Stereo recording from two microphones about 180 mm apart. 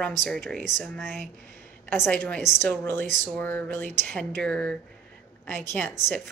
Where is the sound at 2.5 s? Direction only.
5° right (ahead or behind).